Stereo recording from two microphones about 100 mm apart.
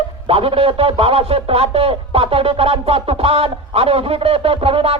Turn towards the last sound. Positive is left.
turn(degrees=-70)  # may be behind; listen again after turning